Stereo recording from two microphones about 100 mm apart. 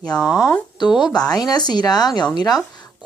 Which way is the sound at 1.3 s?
40° left (ahead or behind).